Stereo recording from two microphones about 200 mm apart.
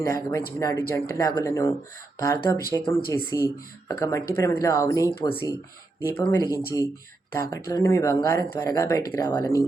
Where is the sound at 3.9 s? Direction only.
15° left (ahead or behind).